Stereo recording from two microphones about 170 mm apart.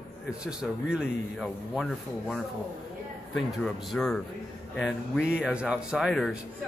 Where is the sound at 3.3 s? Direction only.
Centre (ahead or behind).